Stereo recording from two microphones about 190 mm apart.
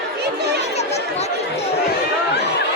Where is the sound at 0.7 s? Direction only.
35° left (ahead or behind).